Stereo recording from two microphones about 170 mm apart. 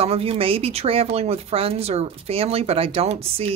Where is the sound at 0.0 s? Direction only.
35° right (ahead or behind).